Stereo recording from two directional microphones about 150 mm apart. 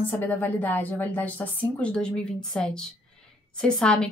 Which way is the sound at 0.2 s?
10° left (ahead or behind).